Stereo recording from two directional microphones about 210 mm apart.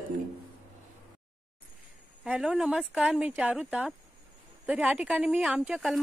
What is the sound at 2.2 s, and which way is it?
Speech, 5° right (ahead or behind).